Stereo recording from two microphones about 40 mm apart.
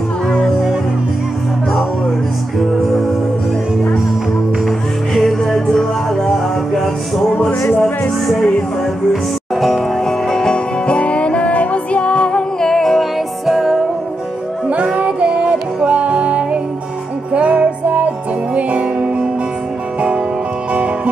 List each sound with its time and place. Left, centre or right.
4.6 s music: centre
6.8 s music: centre
9.1 s music: centre
10.0 s music: centre
12.5 s music: centre
13.5 s music: centre
15.0 s music: right
20.7 s music: right